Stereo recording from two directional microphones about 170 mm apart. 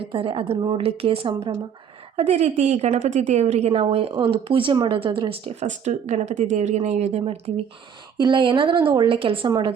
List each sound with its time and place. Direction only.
0.0 s a woman's voice: 30° right (ahead or behind)